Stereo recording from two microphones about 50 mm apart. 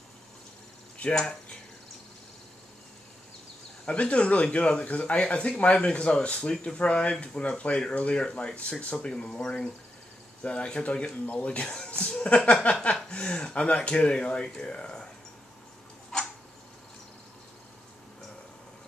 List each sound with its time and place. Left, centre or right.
1.0 s speech: left
3.8 s speech: left